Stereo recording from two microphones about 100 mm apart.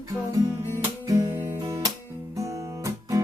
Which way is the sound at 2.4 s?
35° right (ahead or behind).